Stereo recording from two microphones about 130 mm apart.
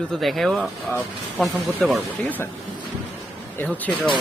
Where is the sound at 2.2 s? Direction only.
15° left (ahead or behind).